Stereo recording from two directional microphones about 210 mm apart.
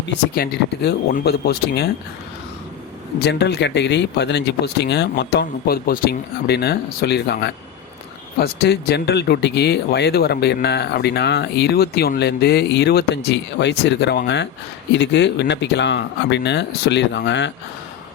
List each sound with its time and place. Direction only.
0.1 s speech: 50° left (ahead or behind)
3.2 s speech: 50° left (ahead or behind)